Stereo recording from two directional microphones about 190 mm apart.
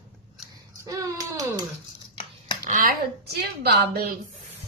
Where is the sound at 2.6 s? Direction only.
45° right (ahead or behind).